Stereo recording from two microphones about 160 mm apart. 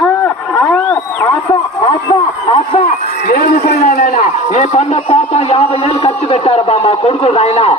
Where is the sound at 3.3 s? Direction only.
65° left (ahead or behind).